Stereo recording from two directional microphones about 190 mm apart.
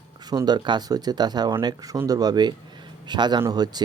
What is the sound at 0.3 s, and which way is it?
Speech, 20° right (ahead or behind).